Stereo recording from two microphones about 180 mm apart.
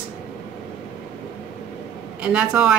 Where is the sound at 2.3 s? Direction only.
5° right (ahead or behind).